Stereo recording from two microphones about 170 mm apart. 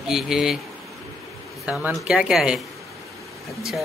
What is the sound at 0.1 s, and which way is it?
Speech, centre (ahead or behind).